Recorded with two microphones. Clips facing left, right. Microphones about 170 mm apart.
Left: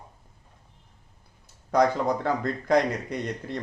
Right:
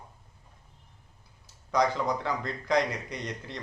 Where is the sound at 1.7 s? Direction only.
50° left (ahead or behind).